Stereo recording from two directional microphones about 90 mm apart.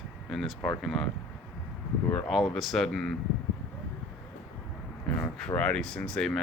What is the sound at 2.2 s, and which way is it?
Speech, centre (ahead or behind).